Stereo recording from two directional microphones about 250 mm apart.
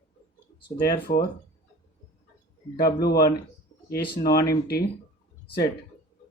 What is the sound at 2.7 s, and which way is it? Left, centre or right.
Speech, left.